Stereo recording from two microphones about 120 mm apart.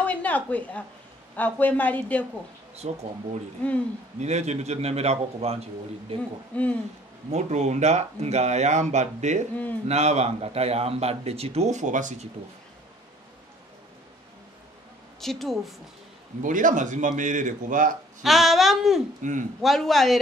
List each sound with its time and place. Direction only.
0.0 s a sound: 10° left (ahead or behind)
1.3 s speech: 15° left (ahead or behind)
2.7 s speech: 60° right (ahead or behind)
3.6 s speech: 10° left (ahead or behind)
4.2 s speech: 70° right (ahead or behind); by 6.2 s 55° right (ahead or behind)
6.5 s speech: 10° left (ahead or behind)
7.2 s speech: 65° right (ahead or behind)
9.8 s a man's voice: 65° right (ahead or behind); by 12.3 s 90° right
15.1 s a woman's voice: centre (ahead or behind)
16.4 s speech: 90° right
18.2 s speech: centre (ahead or behind)